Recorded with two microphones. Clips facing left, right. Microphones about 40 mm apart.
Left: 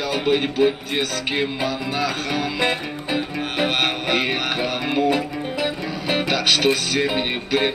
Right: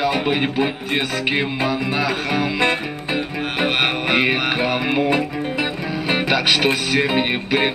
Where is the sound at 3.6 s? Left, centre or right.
Centre.